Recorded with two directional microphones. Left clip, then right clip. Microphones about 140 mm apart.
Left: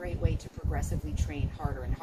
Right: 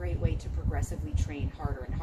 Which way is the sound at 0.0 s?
5° left (ahead or behind).